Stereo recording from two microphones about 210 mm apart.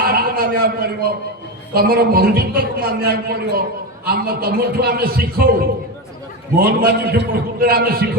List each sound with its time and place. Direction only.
0.0 s a sound: 45° right (ahead or behind)
1.7 s a man's voice: 45° right (ahead or behind)
6.7 s a man's voice: 45° right (ahead or behind)